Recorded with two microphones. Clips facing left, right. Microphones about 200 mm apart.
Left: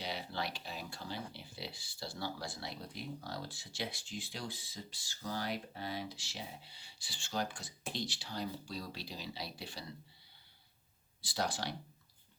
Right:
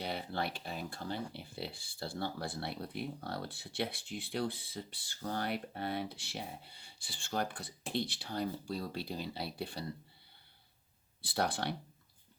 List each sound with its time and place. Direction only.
0.0 s speech: 55° right (ahead or behind)
11.2 s speech: 60° right (ahead or behind)